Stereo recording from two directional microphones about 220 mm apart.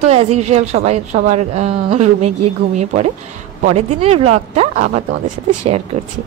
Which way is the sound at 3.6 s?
30° right (ahead or behind).